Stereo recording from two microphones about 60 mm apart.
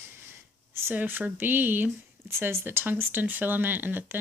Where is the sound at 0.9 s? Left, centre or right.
Right.